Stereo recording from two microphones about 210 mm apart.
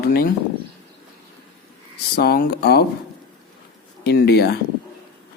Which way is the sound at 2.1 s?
50° left (ahead or behind).